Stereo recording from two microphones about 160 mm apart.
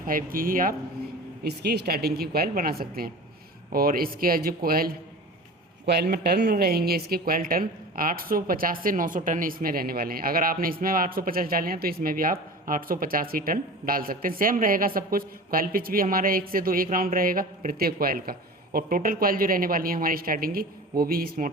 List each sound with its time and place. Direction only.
0.0 s speech: 60° right (ahead or behind)
1.5 s speech: 90° right; by 4.9 s 65° right (ahead or behind)
5.8 s speech: 90° right; by 21.5 s 65° right (ahead or behind)